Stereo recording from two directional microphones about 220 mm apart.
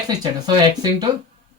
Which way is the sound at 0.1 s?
20° right (ahead or behind).